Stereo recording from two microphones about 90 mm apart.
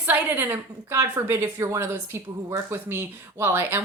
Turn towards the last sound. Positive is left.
turn(degrees=-25)  # may be behind; listen again after turning